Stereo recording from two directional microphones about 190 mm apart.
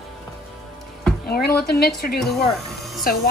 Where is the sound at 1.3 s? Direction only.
55° left (ahead or behind).